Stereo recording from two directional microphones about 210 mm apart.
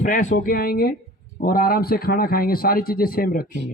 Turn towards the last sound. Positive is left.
turn(degrees=45)  # may be behind; listen again after turning